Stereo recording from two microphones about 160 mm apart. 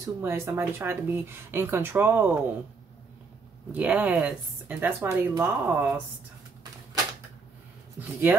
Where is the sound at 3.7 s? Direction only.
10° right (ahead or behind).